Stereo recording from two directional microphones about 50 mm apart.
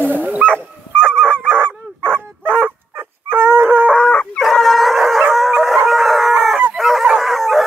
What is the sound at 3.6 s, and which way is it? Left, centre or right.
Chicken, right.